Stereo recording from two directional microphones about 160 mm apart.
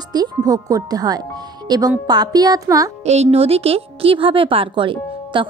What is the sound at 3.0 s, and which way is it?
Speech, 40° right (ahead or behind).